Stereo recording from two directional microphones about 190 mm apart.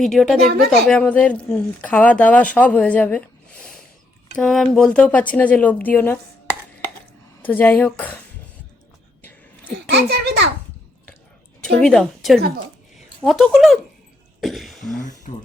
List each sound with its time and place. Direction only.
0.0 s speech: centre (ahead or behind)
7.4 s speech: 10° left (ahead or behind)
9.9 s a child's voice: 60° right (ahead or behind)
11.6 s a woman's voice: 5° left (ahead or behind)
15.3 s speech: 40° left (ahead or behind)